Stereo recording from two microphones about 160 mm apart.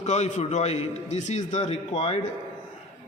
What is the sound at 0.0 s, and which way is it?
A man's voice, 45° left (ahead or behind).